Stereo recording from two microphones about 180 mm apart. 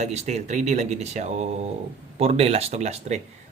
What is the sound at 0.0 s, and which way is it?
Speech, 40° right (ahead or behind).